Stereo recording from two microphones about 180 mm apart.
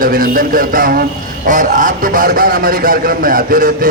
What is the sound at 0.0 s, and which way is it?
A man's voice, 50° right (ahead or behind).